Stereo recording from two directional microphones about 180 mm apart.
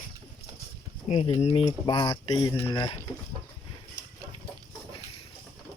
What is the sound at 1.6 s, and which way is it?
Speech, 25° left (ahead or behind).